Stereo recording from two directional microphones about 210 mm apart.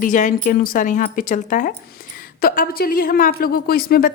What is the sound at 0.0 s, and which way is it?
A woman's voice, 40° left (ahead or behind).